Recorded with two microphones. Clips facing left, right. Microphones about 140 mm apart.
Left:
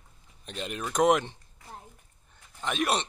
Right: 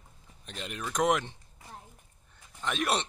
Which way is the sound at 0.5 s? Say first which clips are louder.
Left 3 dB; 25° left (ahead or behind).